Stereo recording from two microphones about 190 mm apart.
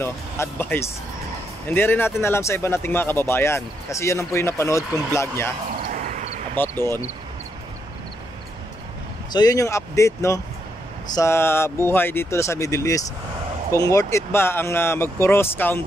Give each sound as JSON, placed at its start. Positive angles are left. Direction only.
{"t": 0.0, "sound": "speech", "side_deg": 10}
{"t": 5.9, "sound": "vehicle", "side_deg": -40}
{"t": 6.5, "sound": "speech", "side_deg": 10}
{"t": 9.3, "sound": "speech", "side_deg": 20}